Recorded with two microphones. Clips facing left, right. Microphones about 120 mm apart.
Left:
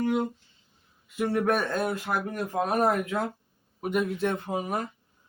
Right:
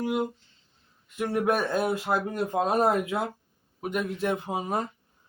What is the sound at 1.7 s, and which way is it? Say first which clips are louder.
Speech: right 2 dB; 15° right (ahead or behind).